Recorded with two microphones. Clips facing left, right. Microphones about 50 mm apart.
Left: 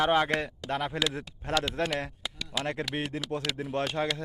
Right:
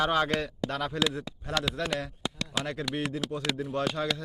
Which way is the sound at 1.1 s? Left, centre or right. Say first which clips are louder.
Left 2 dB; left.